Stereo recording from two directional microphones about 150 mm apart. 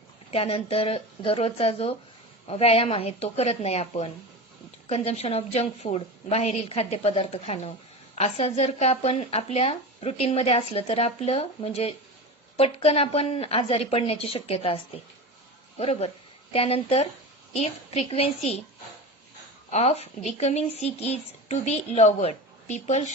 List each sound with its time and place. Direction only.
0.3 s a woman's voice: 40° left (ahead or behind)
15.8 s a woman's voice: 45° left (ahead or behind)
19.7 s speech: 45° left (ahead or behind)